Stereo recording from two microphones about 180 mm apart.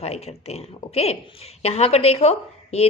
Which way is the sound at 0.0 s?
35° left (ahead or behind).